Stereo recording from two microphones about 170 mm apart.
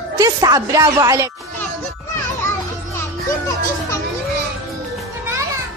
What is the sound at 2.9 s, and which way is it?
Music, 20° left (ahead or behind).